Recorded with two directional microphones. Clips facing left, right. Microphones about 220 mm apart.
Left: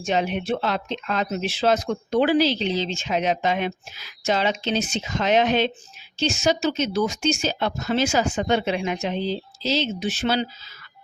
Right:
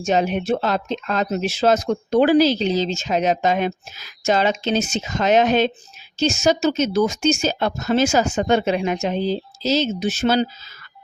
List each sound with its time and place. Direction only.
0.0 s speech: 40° right (ahead or behind)